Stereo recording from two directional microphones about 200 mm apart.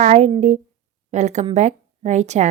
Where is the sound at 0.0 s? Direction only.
35° right (ahead or behind).